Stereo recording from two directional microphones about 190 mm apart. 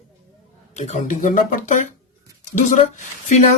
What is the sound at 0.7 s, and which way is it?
Speech, 40° left (ahead or behind).